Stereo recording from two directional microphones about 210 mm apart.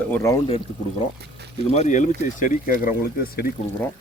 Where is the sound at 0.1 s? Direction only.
10° left (ahead or behind).